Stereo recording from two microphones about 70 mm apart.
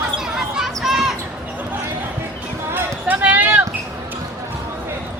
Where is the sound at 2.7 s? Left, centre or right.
Right.